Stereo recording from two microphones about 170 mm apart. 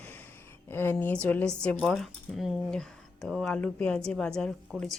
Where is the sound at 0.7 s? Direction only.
15° left (ahead or behind).